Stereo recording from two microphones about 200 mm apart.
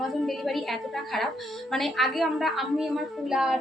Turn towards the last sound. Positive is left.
turn(degrees=-5)  # may be behind; listen again after turning